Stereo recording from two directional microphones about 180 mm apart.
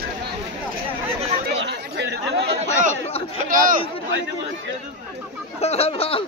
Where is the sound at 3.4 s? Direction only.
50° right (ahead or behind).